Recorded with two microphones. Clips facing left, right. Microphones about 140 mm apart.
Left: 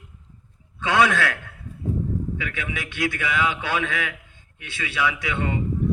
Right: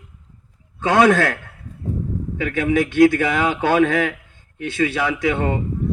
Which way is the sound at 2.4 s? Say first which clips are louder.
Right 12 dB; 45° right (ahead or behind).